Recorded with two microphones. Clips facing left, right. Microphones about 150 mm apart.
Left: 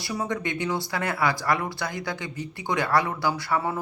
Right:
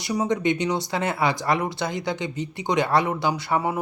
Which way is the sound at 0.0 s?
20° right (ahead or behind).